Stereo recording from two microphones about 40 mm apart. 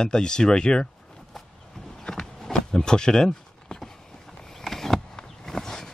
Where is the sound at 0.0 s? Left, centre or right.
Centre.